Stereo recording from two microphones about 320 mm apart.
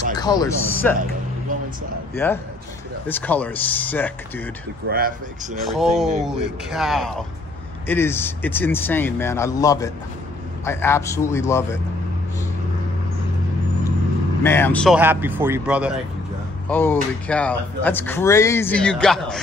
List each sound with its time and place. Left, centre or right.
0.1 s speech: centre
2.1 s speech: centre
4.8 s speech: right
5.7 s speech: centre
14.4 s speech: centre